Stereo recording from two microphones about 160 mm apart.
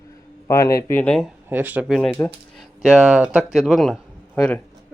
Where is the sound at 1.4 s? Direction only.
10° right (ahead or behind).